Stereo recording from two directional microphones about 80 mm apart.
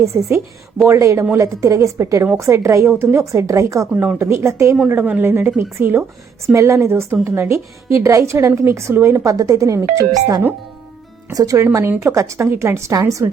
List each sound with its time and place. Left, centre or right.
0.0 s a woman's voice: right
3.9 s a woman's voice: right
4.2 s a woman's voice: right
4.9 s a woman's voice: centre; by 9.3 s right
9.3 s a woman's voice: right